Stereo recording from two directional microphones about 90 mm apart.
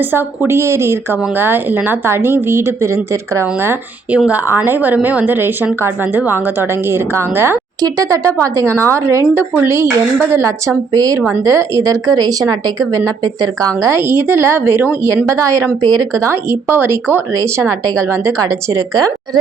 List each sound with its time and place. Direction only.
0.0 s a woman's voice: 25° right (ahead or behind)
7.8 s a woman's voice: 40° right (ahead or behind)
10.9 s a woman's voice: 45° right (ahead or behind)
11.4 s a woman's voice: 35° right (ahead or behind)
13.9 s a woman's voice: 25° right (ahead or behind)
15.0 s speech: 35° right (ahead or behind)